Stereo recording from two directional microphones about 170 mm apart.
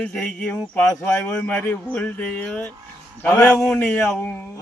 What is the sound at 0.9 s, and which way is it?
Speech, 20° left (ahead or behind).